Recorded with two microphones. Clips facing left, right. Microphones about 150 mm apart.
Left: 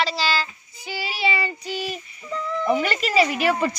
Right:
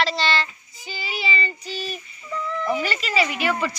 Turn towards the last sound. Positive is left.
turn(degrees=40)  # may be behind; listen again after turning